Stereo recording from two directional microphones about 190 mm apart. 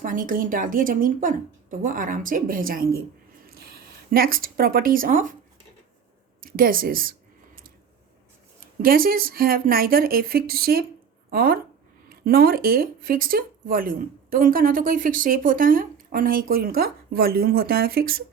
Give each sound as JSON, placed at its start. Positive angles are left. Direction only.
{"t": 0.0, "sound": "speech", "side_deg": -45}
{"t": 6.4, "sound": "a sound", "side_deg": -50}
{"t": 8.6, "sound": "speech", "side_deg": -50}